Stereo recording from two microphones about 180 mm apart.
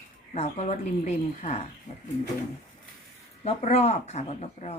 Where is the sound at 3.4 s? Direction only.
35° left (ahead or behind).